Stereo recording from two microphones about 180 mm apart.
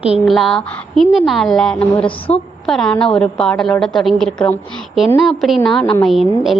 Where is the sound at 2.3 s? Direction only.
35° left (ahead or behind).